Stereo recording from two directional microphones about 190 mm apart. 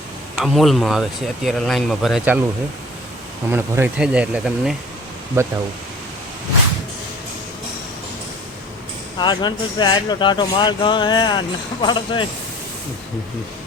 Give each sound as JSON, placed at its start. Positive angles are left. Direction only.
{"t": 0.3, "sound": "speech", "side_deg": 0}
{"t": 3.5, "sound": "speech", "side_deg": -10}
{"t": 5.4, "sound": "speech", "side_deg": -15}
{"t": 9.1, "sound": "speech", "side_deg": 25}